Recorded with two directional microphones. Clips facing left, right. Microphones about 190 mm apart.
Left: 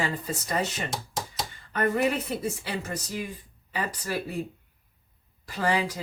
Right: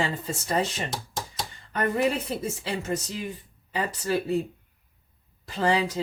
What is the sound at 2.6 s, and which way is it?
Speech, 25° right (ahead or behind).